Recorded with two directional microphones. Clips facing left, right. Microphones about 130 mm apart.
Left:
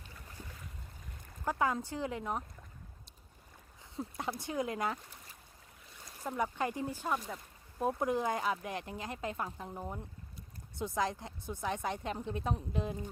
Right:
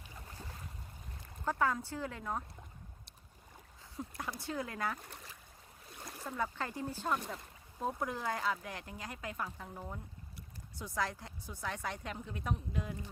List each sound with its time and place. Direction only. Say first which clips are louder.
1.5 s speech: left 1 dB; 15° left (ahead or behind)
3.9 s speech: left 4 dB; 25° left (ahead or behind)
6.0 s boat: right 6 dB; 60° right (ahead or behind)
6.2 s speech: left 4 dB; 15° left (ahead or behind)